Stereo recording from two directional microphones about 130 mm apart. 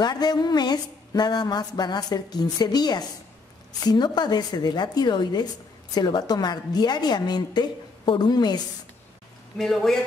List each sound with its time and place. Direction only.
0.0 s speech: 30° left (ahead or behind)
9.6 s speech: centre (ahead or behind)